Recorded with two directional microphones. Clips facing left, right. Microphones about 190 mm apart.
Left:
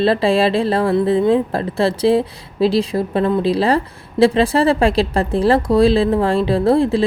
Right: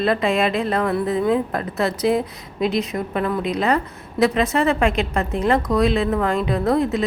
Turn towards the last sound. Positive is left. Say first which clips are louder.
# left 5 dB
turn(degrees=30)  # may be behind; listen again after turning